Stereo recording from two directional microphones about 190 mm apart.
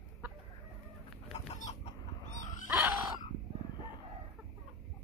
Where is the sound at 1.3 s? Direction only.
35° left (ahead or behind).